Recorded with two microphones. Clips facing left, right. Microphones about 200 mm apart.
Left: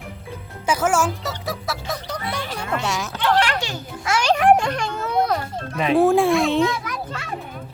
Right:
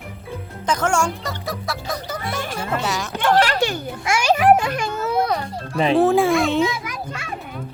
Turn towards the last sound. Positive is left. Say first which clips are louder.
# left 1 dB
turn(degrees=-10)  # may be behind; listen again after turning